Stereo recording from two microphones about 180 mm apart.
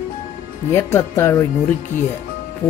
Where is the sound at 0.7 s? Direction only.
15° left (ahead or behind).